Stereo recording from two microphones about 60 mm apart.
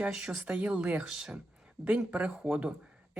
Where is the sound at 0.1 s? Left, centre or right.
Centre.